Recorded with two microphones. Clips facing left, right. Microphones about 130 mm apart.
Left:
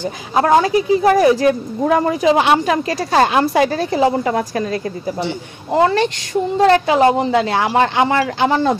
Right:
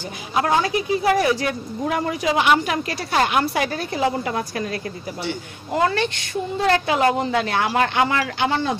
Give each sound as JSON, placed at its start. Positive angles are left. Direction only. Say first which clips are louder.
{"t": 0.3, "sound": "a woman's voice", "louder": "left 7 dB", "side_deg": 35}